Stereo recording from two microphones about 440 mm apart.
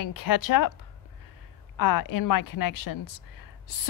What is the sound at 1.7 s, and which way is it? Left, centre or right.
Speech, left.